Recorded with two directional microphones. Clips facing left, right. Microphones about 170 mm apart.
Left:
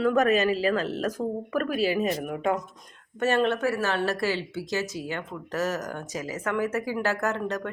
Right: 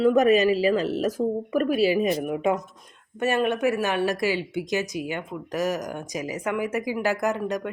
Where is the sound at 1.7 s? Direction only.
45° left (ahead or behind).